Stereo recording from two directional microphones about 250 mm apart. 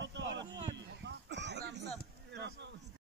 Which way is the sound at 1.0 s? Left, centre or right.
Right.